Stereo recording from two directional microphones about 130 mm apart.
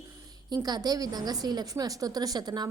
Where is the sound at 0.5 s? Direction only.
30° right (ahead or behind).